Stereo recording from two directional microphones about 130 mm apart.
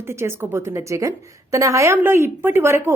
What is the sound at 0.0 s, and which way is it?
A woman's voice, 20° right (ahead or behind).